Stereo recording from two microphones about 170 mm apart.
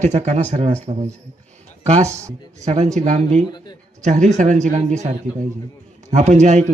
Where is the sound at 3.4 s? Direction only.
25° left (ahead or behind).